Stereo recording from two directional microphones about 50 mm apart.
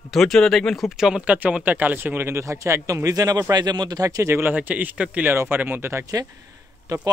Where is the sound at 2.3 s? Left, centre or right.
Right.